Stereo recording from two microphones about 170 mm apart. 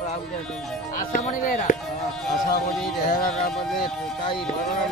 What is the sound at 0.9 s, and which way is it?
Speech, 55° left (ahead or behind).